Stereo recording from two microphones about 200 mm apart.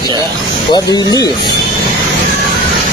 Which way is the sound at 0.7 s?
20° left (ahead or behind).